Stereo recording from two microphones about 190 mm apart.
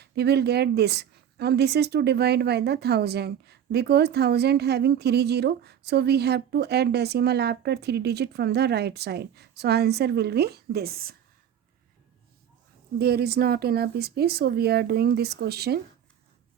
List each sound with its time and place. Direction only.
0.0 s a woman's voice: 60° right (ahead or behind)
13.0 s a woman's voice: 55° right (ahead or behind)